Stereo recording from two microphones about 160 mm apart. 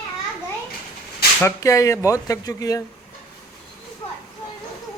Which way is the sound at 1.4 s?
20° left (ahead or behind).